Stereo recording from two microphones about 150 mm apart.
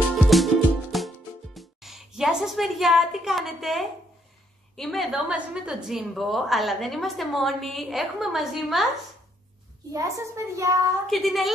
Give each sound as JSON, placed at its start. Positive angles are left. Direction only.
{"t": 0.3, "sound": "music", "side_deg": 0}
{"t": 4.7, "sound": "a woman's voice", "side_deg": 0}
{"t": 9.9, "sound": "a child's voice", "side_deg": -20}
{"t": 11.1, "sound": "a woman's voice", "side_deg": 0}